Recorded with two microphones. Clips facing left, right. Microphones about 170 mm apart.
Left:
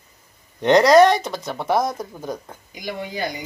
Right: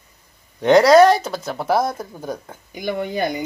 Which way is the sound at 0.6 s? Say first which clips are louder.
Right 2 dB; 5° right (ahead or behind).